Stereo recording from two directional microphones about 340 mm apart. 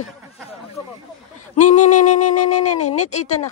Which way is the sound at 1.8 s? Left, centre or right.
Left.